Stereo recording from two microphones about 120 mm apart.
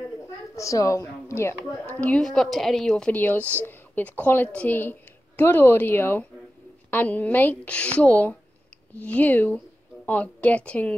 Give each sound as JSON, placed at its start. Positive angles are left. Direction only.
{"t": 0.6, "sound": "speech", "side_deg": 25}
{"t": 2.0, "sound": "a woman's voice", "side_deg": 10}